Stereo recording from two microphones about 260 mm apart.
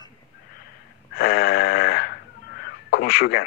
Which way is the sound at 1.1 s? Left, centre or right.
Left.